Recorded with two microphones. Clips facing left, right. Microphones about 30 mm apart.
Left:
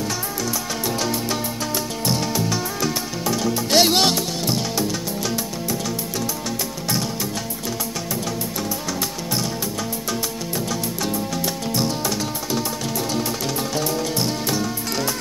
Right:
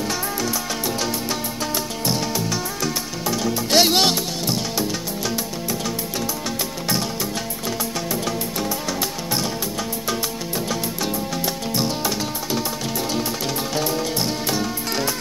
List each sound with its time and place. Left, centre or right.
0.0 s music: centre
0.8 s music: centre
8.1 s music: right
10.7 s music: centre
13.7 s music: centre